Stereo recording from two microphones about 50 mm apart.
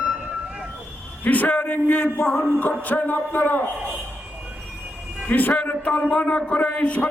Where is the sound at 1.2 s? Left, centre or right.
Left.